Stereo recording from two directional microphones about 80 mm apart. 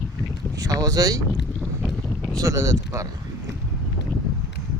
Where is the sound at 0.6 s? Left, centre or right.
Right.